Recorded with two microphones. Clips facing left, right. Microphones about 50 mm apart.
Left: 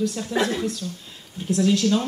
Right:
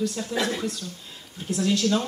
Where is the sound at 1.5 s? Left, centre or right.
Centre.